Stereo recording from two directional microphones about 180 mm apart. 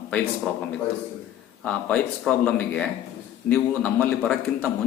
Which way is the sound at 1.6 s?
5° left (ahead or behind).